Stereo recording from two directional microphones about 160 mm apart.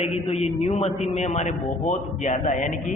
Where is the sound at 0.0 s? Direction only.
40° left (ahead or behind).